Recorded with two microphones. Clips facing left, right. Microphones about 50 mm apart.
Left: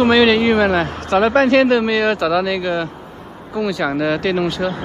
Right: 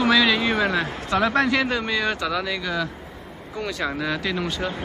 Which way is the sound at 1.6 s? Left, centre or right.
Left.